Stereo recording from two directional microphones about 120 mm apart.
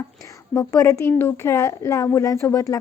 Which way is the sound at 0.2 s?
25° left (ahead or behind).